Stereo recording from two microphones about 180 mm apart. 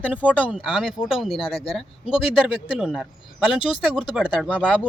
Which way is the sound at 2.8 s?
5° right (ahead or behind).